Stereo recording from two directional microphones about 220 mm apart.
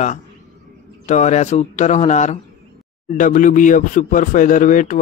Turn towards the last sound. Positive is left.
turn(degrees=35)  # may be behind; listen again after turning